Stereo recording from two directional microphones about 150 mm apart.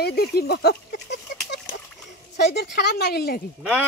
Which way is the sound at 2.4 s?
90° left.